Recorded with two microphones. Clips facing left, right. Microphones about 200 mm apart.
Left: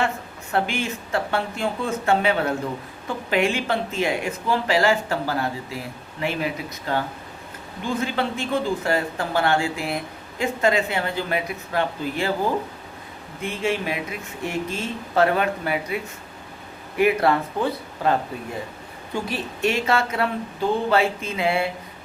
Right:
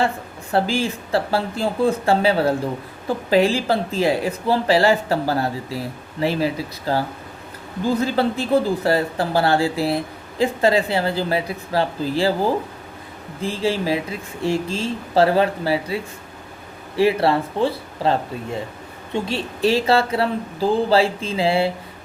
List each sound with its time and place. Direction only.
0.5 s speech: 30° right (ahead or behind)
13.4 s speech: 30° right (ahead or behind)
17.0 s speech: 30° right (ahead or behind)